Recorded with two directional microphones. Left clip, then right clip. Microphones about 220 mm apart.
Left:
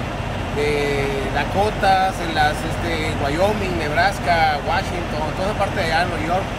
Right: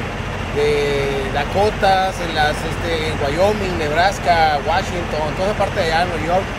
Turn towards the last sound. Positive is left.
turn(degrees=10)  # may be behind; listen again after turning